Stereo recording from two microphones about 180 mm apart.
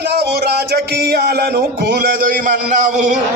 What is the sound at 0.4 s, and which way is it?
Music, 60° right (ahead or behind).